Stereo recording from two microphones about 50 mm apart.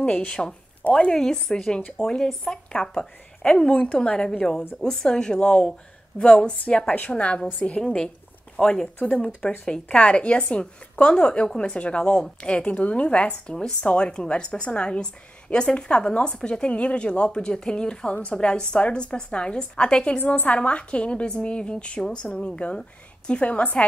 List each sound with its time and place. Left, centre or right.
0.0 s speech: left
3.4 s a woman's voice: left